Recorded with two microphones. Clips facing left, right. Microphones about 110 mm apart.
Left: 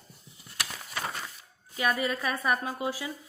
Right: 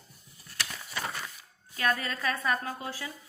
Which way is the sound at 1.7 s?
15° left (ahead or behind).